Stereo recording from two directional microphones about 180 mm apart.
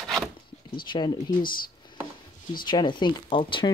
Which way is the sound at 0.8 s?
25° left (ahead or behind).